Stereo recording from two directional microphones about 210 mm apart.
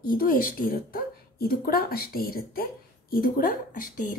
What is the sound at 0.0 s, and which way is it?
Speech, 45° left (ahead or behind).